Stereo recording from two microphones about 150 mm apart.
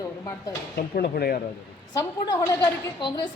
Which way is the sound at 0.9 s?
90° left.